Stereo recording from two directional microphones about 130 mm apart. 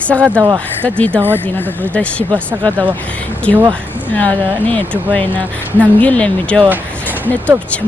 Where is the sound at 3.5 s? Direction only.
45° right (ahead or behind).